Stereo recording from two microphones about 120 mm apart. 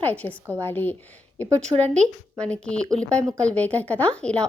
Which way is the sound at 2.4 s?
10° left (ahead or behind).